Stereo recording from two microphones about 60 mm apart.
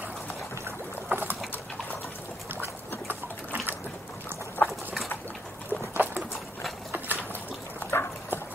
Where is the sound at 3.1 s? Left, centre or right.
Right.